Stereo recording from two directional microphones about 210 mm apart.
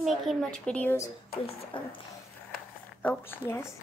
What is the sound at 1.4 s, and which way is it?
Speech, 25° left (ahead or behind).